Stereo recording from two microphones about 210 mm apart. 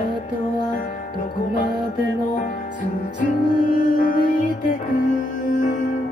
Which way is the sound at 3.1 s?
40° left (ahead or behind).